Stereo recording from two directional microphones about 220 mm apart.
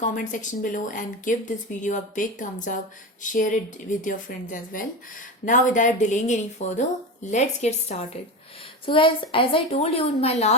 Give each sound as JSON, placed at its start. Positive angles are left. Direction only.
{"t": 0.0, "sound": "a woman's voice", "side_deg": 35}